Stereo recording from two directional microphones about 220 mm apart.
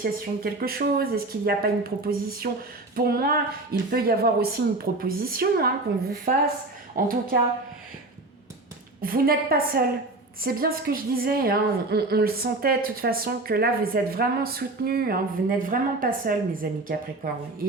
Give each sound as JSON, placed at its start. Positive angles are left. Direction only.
{"t": 0.0, "sound": "a woman's voice", "side_deg": -45}
{"t": 6.9, "sound": "a woman's voice", "side_deg": -40}
{"t": 9.0, "sound": "a woman's voice", "side_deg": -40}